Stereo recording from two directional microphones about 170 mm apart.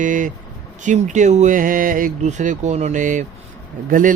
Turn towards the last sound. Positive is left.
turn(degrees=-50)  # may be behind; listen again after turning